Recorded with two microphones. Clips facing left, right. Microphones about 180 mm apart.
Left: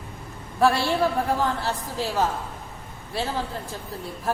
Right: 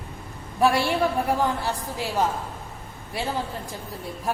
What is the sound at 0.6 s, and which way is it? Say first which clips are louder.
A woman's voice: even; 15° right (ahead or behind).